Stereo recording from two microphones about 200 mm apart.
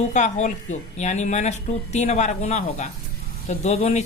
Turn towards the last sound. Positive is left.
turn(degrees=35)  # may be behind; listen again after turning